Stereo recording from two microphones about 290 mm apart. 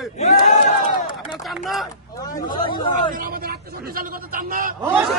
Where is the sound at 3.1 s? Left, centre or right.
Right.